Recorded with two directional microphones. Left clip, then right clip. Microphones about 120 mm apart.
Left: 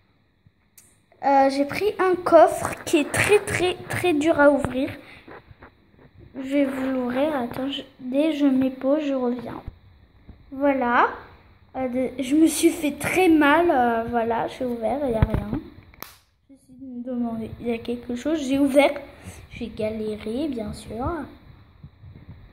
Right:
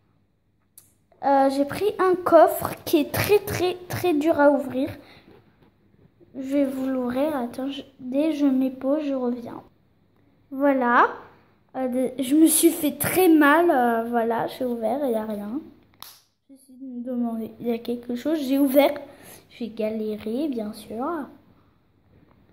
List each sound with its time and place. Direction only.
1.2 s a woman's voice: 5° right (ahead or behind)
6.3 s a woman's voice: 5° right (ahead or behind)
10.5 s a woman's voice: 20° right (ahead or behind)
15.9 s a sound: 5° left (ahead or behind)
17.0 s a woman's voice: 15° right (ahead or behind)
18.0 s a woman's voice: 5° right (ahead or behind)
20.6 s a woman's voice: 5° right (ahead or behind)